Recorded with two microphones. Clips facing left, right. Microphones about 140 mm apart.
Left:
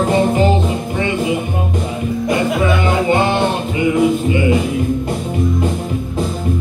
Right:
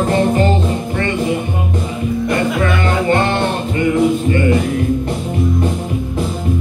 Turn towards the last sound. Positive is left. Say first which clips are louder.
# even
turn(degrees=10)  # may be behind; listen again after turning